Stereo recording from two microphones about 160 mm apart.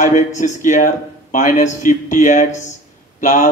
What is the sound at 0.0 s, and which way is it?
Speech, 50° left (ahead or behind).